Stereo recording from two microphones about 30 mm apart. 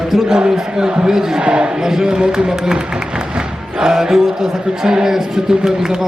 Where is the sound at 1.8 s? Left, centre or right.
Centre.